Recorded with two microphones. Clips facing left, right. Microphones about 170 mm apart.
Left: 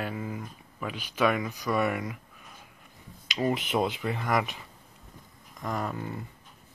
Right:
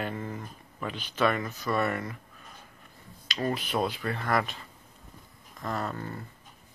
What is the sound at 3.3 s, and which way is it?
Speech, 15° left (ahead or behind).